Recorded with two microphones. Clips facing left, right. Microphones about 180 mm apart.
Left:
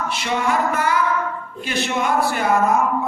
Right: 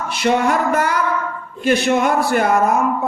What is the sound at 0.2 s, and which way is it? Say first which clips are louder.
Speech: right 6 dB; 50° right (ahead or behind).